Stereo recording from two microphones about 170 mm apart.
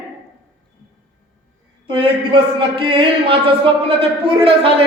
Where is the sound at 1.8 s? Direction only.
30° right (ahead or behind).